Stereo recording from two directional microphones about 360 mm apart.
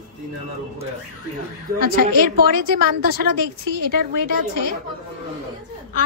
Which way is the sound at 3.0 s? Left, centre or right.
Right.